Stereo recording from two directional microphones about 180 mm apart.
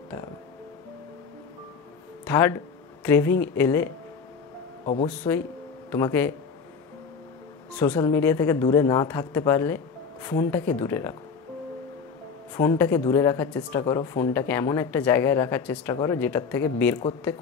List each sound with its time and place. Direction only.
2.2 s speech: 15° left (ahead or behind)
5.0 s speech: 10° left (ahead or behind)
8.0 s speech: 15° left (ahead or behind)
12.5 s speech: 15° left (ahead or behind)